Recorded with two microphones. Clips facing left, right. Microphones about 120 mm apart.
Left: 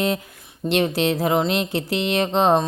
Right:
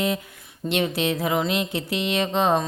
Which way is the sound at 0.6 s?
20° left (ahead or behind).